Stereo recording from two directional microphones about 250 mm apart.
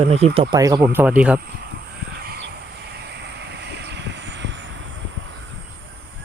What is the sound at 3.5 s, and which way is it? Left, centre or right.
Vehicle, right.